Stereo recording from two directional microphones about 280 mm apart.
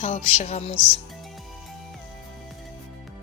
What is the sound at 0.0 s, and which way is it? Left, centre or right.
Music, left.